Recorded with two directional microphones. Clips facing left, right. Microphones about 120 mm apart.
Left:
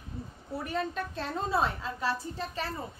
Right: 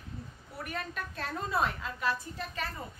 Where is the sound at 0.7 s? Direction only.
30° left (ahead or behind).